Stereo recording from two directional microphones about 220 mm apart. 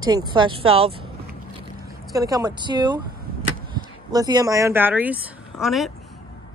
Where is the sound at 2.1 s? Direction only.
15° right (ahead or behind).